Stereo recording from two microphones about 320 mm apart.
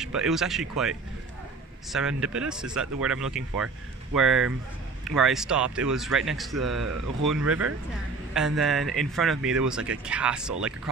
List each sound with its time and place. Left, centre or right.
0.0 s speech: centre
6.5 s speech: right
7.2 s speech: centre